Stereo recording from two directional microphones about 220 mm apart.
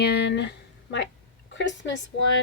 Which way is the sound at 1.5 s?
55° left (ahead or behind).